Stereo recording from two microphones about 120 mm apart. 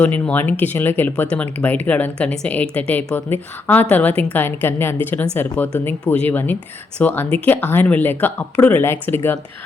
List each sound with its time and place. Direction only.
0.0 s speech: 15° left (ahead or behind)